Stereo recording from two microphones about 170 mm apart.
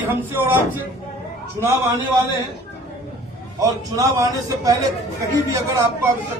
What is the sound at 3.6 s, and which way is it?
A man's voice, 20° right (ahead or behind).